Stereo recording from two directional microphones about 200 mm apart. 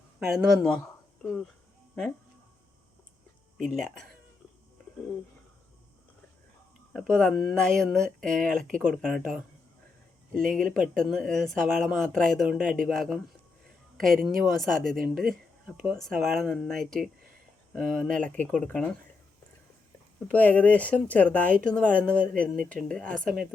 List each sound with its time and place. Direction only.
0.2 s speech: centre (ahead or behind)
3.6 s speech: centre (ahead or behind)
7.1 s speech: 5° left (ahead or behind)
8.4 s speech: 40° right (ahead or behind)
8.9 s speech: centre (ahead or behind)
10.6 s speech: 45° right (ahead or behind)
10.9 s speech: centre (ahead or behind)
13.9 s a sound: centre (ahead or behind)
14.3 s speech: centre (ahead or behind)
14.9 s speech: 45° right (ahead or behind)
15.6 s speech: centre (ahead or behind)
20.1 s speech: 5° left (ahead or behind)